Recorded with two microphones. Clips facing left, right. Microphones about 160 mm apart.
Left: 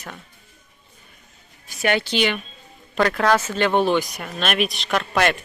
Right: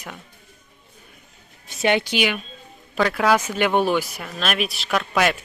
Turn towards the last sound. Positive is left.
turn(degrees=-5)  # may be behind; listen again after turning